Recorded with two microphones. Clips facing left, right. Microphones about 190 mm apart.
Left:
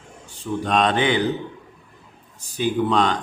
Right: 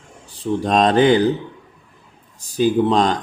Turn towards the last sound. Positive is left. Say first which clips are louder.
# right 4 dB
turn(degrees=-35)  # may be behind; listen again after turning